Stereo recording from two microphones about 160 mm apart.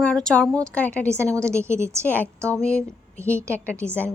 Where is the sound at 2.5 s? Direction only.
10° left (ahead or behind).